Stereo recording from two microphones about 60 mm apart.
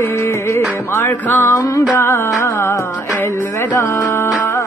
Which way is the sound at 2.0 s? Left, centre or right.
Left.